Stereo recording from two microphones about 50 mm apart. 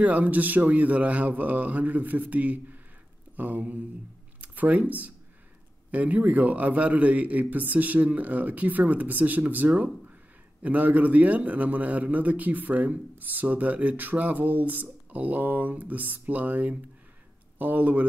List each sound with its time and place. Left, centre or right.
0.0 s a man's voice: right